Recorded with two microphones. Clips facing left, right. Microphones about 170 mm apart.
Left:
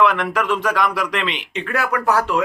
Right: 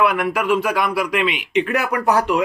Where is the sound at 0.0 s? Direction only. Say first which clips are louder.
Even; 10° right (ahead or behind).